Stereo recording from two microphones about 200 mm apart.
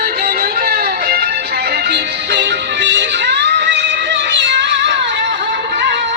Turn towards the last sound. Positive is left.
turn(degrees=-65)  # may be behind; listen again after turning